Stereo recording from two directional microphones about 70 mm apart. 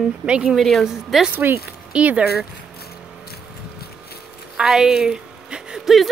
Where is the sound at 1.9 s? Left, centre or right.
Centre.